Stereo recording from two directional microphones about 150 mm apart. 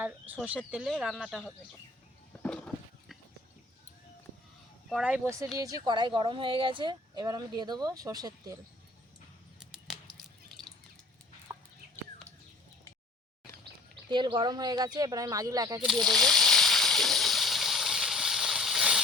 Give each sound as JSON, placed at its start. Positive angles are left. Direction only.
{"t": 0.4, "sound": "speech", "side_deg": -10}
{"t": 2.3, "sound": "a sound", "side_deg": 10}
{"t": 4.9, "sound": "speech", "side_deg": -5}
{"t": 5.5, "sound": "speech", "side_deg": -25}
{"t": 9.6, "sound": "a sound", "side_deg": 0}
{"t": 11.5, "sound": "chicken", "side_deg": -15}
{"t": 14.1, "sound": "speech", "side_deg": -30}
{"t": 15.9, "sound": "water", "side_deg": 0}